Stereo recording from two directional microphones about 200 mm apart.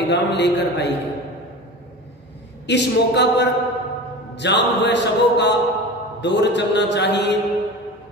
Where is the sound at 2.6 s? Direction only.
60° left (ahead or behind).